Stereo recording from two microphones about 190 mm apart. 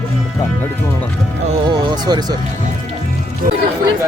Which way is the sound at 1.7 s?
20° right (ahead or behind).